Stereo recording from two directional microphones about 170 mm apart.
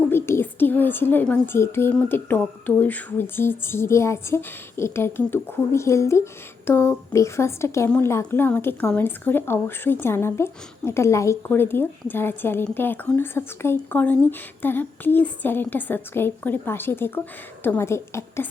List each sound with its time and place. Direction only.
0.1 s a woman's voice: 15° left (ahead or behind)